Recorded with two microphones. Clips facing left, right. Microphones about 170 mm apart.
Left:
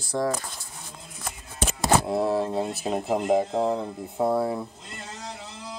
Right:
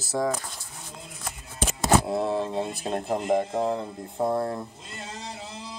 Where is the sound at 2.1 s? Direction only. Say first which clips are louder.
Left 2 dB; 5° left (ahead or behind).